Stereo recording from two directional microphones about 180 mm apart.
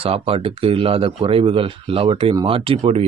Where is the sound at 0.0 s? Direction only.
30° right (ahead or behind).